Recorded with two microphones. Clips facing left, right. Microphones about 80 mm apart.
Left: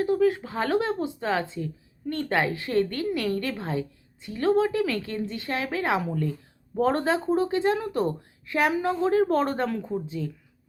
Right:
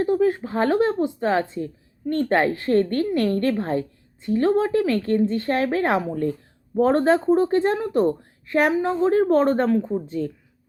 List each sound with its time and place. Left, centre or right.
0.0 s a woman's voice: right
10.1 s speech: right